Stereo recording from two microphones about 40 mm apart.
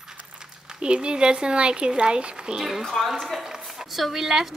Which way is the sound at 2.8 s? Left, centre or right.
Centre.